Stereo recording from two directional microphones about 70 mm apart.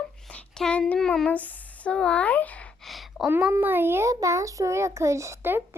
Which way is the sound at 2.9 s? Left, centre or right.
Centre.